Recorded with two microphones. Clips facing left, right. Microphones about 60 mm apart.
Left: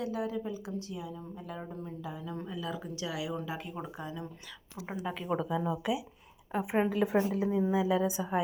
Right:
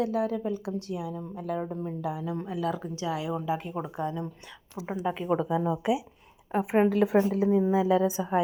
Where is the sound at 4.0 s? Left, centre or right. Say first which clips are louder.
Right 9 dB; right.